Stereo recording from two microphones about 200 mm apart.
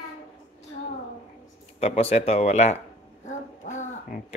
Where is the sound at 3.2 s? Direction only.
35° left (ahead or behind).